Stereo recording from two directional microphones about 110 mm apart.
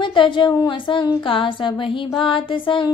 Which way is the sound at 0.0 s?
45° left (ahead or behind).